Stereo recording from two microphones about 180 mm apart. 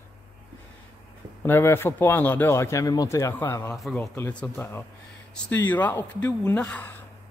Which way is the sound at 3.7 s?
Centre (ahead or behind).